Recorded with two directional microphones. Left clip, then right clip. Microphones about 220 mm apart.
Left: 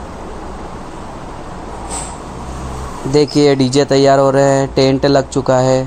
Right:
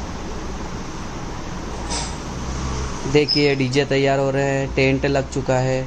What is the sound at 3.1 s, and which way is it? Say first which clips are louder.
Speech: left 6 dB; 25° left (ahead or behind).